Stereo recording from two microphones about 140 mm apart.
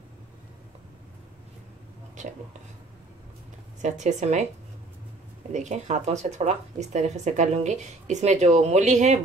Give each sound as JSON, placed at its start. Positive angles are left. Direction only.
{"t": 3.8, "sound": "speech", "side_deg": -55}
{"t": 5.5, "sound": "speech", "side_deg": -55}